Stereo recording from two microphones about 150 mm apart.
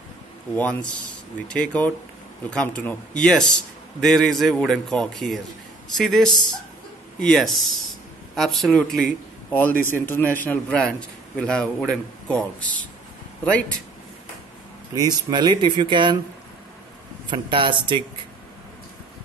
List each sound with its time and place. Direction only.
0.6 s a man's voice: 10° left (ahead or behind)
15.0 s speech: 25° right (ahead or behind)
17.3 s speech: 30° right (ahead or behind)